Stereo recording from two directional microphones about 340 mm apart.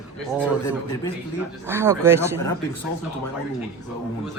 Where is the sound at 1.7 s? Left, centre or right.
Centre.